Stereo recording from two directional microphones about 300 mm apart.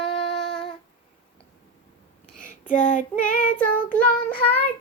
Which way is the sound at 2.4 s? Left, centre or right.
Left.